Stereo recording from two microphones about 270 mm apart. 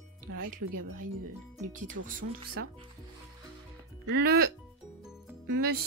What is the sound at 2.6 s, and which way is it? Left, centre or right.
Speech, right.